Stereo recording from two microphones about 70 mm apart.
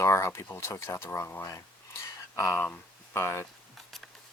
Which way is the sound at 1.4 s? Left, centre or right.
Left.